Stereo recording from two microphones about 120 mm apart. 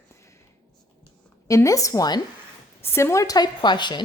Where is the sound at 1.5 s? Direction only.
25° left (ahead or behind).